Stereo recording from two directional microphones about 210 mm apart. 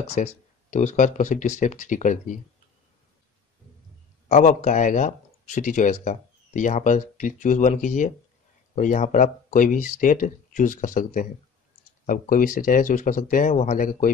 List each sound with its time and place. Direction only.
0.0 s speech: 30° left (ahead or behind)
4.3 s speech: 35° left (ahead or behind)